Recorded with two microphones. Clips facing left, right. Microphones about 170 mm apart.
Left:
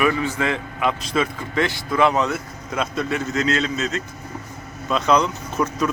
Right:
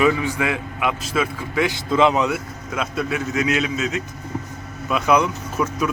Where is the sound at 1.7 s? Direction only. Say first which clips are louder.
Right 2 dB; 20° right (ahead or behind).